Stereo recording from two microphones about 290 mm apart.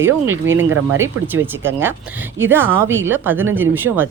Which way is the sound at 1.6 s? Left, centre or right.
Centre.